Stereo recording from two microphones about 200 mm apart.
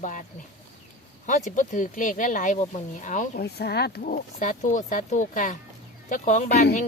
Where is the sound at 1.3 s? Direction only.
40° left (ahead or behind).